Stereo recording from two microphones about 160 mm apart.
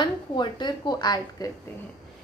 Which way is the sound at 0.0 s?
30° left (ahead or behind).